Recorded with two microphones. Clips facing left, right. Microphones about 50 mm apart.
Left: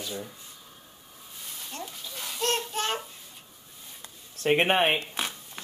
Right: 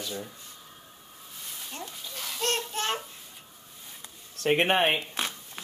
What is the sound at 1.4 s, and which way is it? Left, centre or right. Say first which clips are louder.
Babbling: left 1 dB; centre.